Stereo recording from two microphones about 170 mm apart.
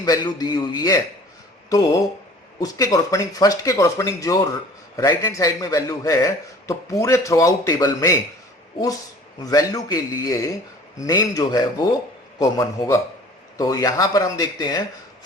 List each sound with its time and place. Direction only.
0.0 s a man's voice: 20° left (ahead or behind)
2.6 s a man's voice: 20° left (ahead or behind)
9.4 s a man's voice: 20° left (ahead or behind)